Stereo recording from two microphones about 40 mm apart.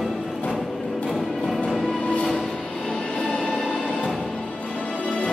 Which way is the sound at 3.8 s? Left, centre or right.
Left.